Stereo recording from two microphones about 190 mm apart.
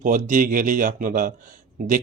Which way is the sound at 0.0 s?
45° right (ahead or behind).